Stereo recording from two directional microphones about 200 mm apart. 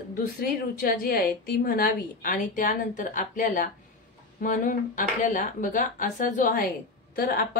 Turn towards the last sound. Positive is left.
turn(degrees=50)  # may be behind; listen again after turning